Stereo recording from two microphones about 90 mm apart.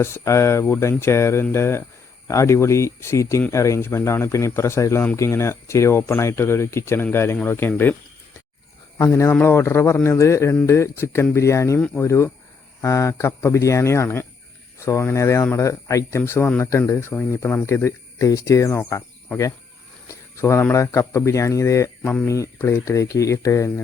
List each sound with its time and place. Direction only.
0.0 s speech: 30° left (ahead or behind)
9.4 s speech: 25° left (ahead or behind)
20.1 s speech: 30° left (ahead or behind)